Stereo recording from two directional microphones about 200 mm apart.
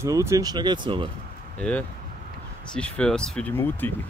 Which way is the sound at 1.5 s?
5° left (ahead or behind).